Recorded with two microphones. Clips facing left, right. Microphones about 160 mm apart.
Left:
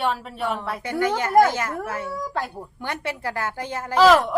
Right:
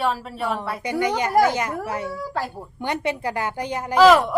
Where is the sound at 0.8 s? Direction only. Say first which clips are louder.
Right 1 dB; 15° right (ahead or behind).